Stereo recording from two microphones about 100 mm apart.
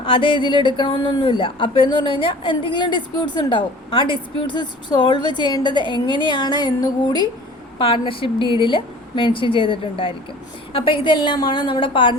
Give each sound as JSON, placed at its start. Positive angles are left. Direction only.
{"t": 0.0, "sound": "a woman's voice", "side_deg": 60}
{"t": 7.8, "sound": "a woman's voice", "side_deg": 60}